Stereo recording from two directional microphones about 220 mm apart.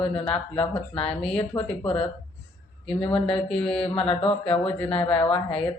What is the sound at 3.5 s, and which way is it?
Mantra, 5° left (ahead or behind).